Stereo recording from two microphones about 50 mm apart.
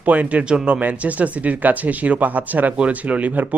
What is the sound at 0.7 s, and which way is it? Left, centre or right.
Speech, right.